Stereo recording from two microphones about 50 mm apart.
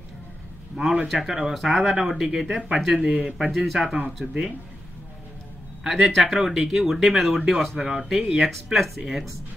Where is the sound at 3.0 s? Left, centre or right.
Right.